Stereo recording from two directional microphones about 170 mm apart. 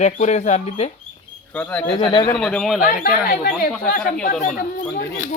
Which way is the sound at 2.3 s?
5° left (ahead or behind).